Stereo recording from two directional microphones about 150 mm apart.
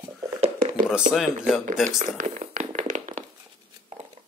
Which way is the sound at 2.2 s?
55° right (ahead or behind).